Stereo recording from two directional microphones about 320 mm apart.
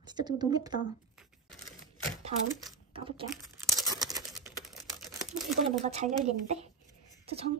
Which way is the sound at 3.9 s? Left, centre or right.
Centre.